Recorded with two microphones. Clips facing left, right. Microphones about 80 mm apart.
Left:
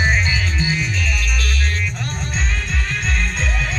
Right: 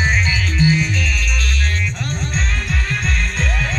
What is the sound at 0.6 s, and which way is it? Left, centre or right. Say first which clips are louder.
Music: right 5 dB; centre.